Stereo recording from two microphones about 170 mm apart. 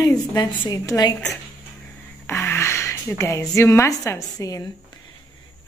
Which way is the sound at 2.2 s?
15° left (ahead or behind).